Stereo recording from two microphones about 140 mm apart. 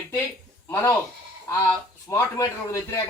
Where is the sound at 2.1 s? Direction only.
20° left (ahead or behind).